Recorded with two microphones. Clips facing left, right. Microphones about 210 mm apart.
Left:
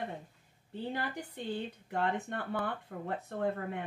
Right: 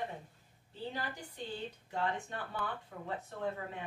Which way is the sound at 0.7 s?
60° left (ahead or behind).